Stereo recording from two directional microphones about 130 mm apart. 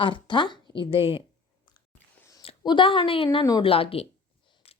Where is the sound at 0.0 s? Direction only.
40° left (ahead or behind).